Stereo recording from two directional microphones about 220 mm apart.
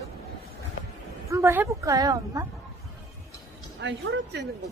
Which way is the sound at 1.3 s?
10° right (ahead or behind).